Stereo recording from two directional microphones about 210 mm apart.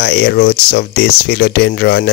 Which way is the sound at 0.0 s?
50° left (ahead or behind).